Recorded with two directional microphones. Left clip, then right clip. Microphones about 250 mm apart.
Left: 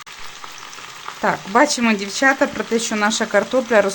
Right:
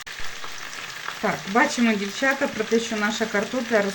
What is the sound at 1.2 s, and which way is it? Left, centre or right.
Speech, left.